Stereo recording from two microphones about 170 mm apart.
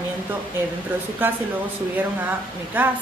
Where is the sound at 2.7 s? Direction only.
10° right (ahead or behind).